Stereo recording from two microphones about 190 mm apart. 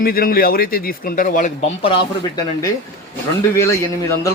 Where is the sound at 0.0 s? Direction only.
50° left (ahead or behind).